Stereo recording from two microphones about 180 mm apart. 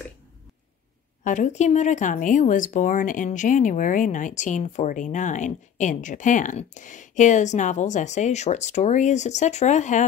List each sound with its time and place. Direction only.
1.2 s speech: 45° left (ahead or behind)